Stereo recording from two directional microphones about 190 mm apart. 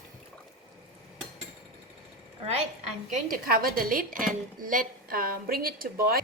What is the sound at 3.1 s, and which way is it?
A woman's voice, 50° right (ahead or behind).